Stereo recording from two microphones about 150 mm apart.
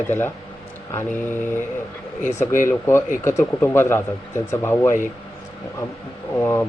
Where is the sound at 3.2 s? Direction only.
20° left (ahead or behind).